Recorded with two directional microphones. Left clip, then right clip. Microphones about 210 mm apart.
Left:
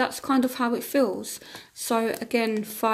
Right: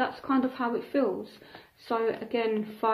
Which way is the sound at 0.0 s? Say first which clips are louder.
Left 4 dB; 45° left (ahead or behind).